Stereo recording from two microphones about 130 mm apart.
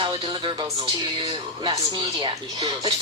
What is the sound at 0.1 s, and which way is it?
Music, 40° right (ahead or behind).